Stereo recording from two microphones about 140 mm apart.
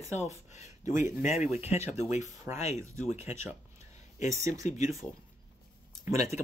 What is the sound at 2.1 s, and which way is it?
Speech, 60° left (ahead or behind).